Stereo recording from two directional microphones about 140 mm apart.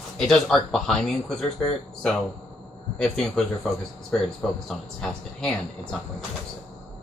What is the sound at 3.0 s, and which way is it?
Speech, 5° left (ahead or behind).